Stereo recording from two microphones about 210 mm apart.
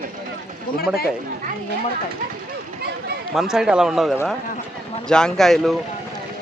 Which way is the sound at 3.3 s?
Centre (ahead or behind).